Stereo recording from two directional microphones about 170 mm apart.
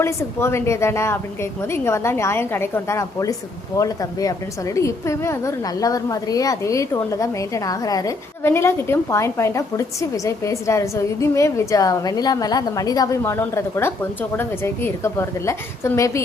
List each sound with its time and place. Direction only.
0.0 s a woman's voice: 15° left (ahead or behind)